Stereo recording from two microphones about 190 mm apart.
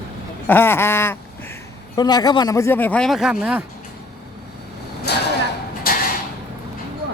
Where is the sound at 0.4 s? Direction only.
10° left (ahead or behind); by 3.6 s 5° right (ahead or behind).